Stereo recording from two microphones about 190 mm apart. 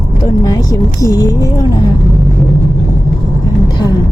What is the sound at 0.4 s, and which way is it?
Speech, 20° left (ahead or behind).